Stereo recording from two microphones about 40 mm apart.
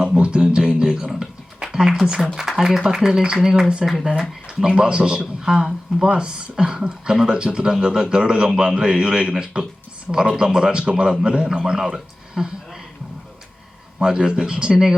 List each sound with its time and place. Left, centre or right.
0.0 s a sound: right
2.3 s speech: centre
4.4 s speech: right
8.7 s speech: right
14.0 s speech: centre